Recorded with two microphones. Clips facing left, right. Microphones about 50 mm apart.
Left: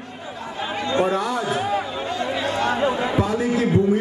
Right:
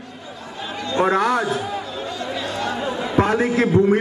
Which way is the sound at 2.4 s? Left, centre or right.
Left.